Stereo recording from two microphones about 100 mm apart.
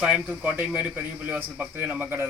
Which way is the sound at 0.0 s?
10° right (ahead or behind).